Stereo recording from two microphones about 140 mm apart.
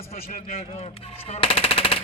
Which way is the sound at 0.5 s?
45° left (ahead or behind).